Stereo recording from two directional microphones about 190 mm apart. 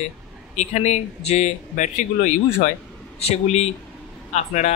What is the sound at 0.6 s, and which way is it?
Speech, 35° left (ahead or behind).